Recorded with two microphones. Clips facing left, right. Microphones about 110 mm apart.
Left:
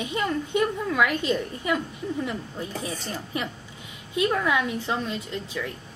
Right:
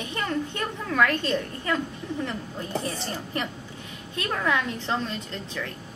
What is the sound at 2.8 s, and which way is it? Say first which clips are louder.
A woman's voice: right 1 dB; 10° left (ahead or behind).